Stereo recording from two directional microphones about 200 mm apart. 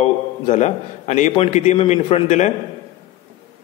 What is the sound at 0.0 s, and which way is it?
A man's voice, 35° left (ahead or behind).